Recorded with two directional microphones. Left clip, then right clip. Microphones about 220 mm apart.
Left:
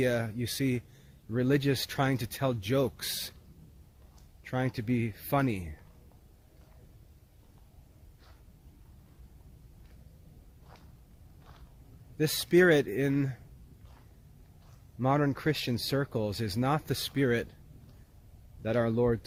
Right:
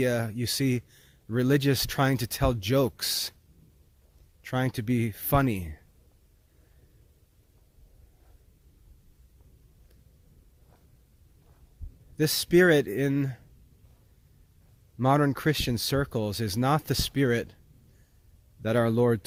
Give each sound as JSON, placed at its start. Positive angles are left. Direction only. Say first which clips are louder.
{"t": 0.0, "sound": "speech", "louder": "right 2 dB", "side_deg": -45}
{"t": 4.4, "sound": "speech", "louder": "right 3 dB", "side_deg": -50}
{"t": 12.1, "sound": "speech", "louder": "right 3 dB", "side_deg": -45}
{"t": 14.9, "sound": "speech", "louder": "right 4 dB", "side_deg": -50}
{"t": 18.6, "sound": "speech", "louder": "right 4 dB", "side_deg": -50}